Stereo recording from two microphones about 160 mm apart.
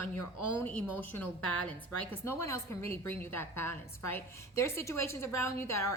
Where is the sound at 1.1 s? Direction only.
10° left (ahead or behind).